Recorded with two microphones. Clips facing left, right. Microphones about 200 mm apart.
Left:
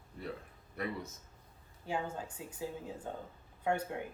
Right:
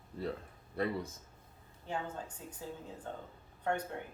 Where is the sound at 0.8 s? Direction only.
30° right (ahead or behind).